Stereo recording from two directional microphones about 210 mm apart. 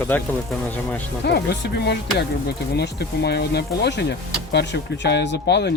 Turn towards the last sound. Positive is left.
turn(degrees=55)  # may be behind; listen again after turning